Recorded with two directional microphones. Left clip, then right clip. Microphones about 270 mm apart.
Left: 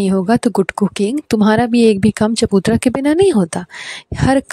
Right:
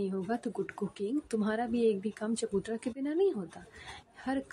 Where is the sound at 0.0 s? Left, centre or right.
Left.